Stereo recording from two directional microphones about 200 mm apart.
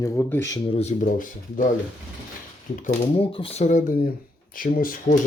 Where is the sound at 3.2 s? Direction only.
30° left (ahead or behind); by 5.2 s 45° left (ahead or behind).